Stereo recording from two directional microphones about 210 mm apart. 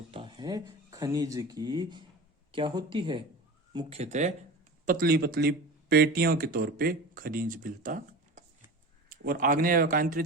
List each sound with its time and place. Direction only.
0.1 s speech: 25° right (ahead or behind); by 10.2 s 40° right (ahead or behind)